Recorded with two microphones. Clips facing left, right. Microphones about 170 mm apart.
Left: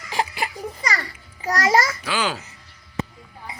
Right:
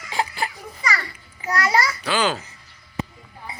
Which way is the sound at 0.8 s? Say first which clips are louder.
Right 4 dB; 40° left (ahead or behind).